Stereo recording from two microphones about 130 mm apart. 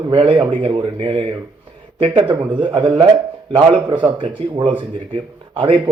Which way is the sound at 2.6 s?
40° right (ahead or behind).